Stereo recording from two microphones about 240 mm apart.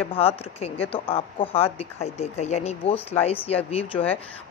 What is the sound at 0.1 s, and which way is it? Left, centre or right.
Speech, left.